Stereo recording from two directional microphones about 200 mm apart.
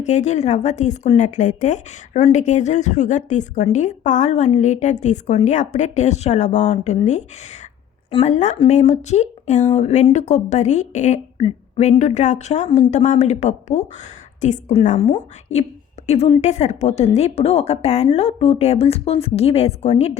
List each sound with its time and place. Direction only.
0.0 s speech: 35° left (ahead or behind)